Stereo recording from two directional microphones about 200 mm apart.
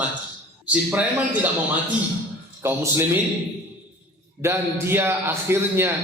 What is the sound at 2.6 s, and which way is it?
Speech, 10° right (ahead or behind).